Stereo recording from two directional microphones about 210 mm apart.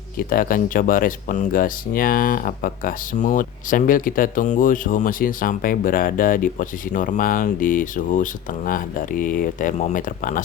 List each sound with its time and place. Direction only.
0.2 s speech: 45° left (ahead or behind)